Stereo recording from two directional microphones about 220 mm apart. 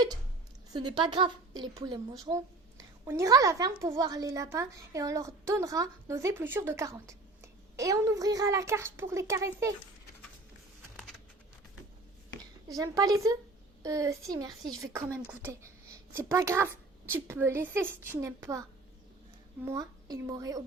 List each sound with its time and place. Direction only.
0.7 s a woman's voice: 20° right (ahead or behind)
12.6 s a woman's voice: 15° right (ahead or behind)
19.6 s a woman's voice: 15° right (ahead or behind)